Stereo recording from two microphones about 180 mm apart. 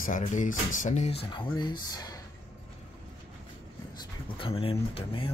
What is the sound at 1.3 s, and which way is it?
Speech, 25° left (ahead or behind).